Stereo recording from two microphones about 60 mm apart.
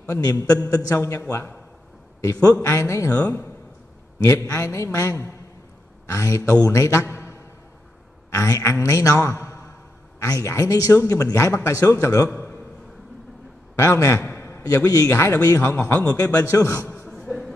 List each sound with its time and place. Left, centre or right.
0.1 s a man's voice: left
0.9 s a man's voice: left
2.6 s a man's voice: left
4.5 s a woman's voice: left
13.7 s a man's voice: left
17.2 s a sound: centre